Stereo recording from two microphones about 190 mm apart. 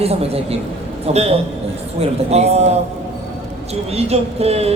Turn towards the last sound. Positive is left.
turn(degrees=-35)  # may be behind; listen again after turning